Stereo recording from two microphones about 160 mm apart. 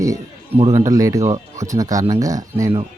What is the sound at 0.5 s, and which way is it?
Speech, 40° right (ahead or behind).